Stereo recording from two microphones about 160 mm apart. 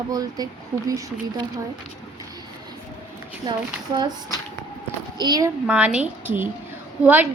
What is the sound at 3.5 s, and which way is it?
Speech, 25° right (ahead or behind).